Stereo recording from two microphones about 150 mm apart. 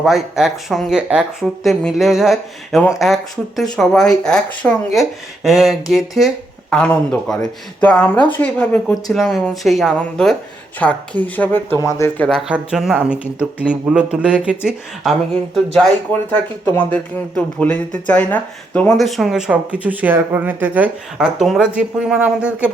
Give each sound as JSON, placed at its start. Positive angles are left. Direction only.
{"t": 0.0, "sound": "speech", "side_deg": 0}
{"t": 12.4, "sound": "speech", "side_deg": -5}